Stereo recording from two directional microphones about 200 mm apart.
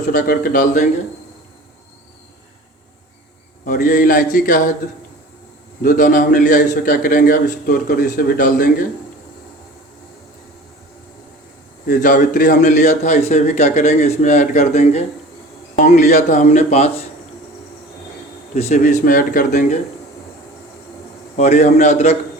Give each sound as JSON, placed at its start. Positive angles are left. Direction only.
{"t": 0.1, "sound": "a man's voice", "side_deg": 45}
{"t": 3.7, "sound": "a man's voice", "side_deg": 40}
{"t": 5.8, "sound": "a man's voice", "side_deg": 45}
{"t": 11.9, "sound": "a man's voice", "side_deg": 40}
{"t": 18.5, "sound": "a man's voice", "side_deg": 35}
{"t": 21.3, "sound": "a man's voice", "side_deg": 35}